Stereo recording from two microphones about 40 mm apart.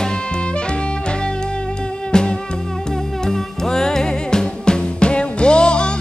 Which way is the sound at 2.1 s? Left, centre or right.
Centre.